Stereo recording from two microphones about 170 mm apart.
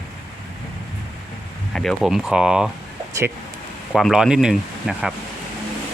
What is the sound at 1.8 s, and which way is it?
Speech, centre (ahead or behind).